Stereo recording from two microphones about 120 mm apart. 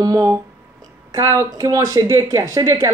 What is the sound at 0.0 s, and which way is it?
Speech, 30° right (ahead or behind).